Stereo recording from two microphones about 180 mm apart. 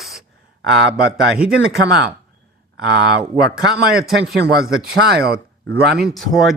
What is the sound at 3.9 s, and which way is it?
Speech, centre (ahead or behind).